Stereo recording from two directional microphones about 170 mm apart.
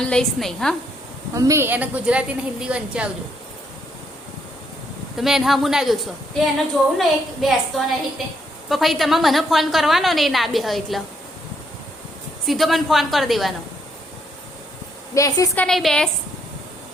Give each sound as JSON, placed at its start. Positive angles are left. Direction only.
{"t": 0.0, "sound": "a woman's voice", "side_deg": 5}
{"t": 1.3, "sound": "a woman's voice", "side_deg": -20}
{"t": 5.1, "sound": "a woman's voice", "side_deg": 0}
{"t": 7.0, "sound": "a woman's voice", "side_deg": 0}
{"t": 12.5, "sound": "a woman's voice", "side_deg": 0}
{"t": 15.1, "sound": "a woman's voice", "side_deg": 20}
{"t": 15.6, "sound": "a woman's voice", "side_deg": 0}